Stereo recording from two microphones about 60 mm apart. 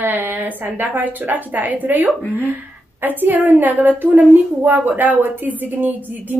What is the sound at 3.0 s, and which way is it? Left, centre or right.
A woman's voice, right.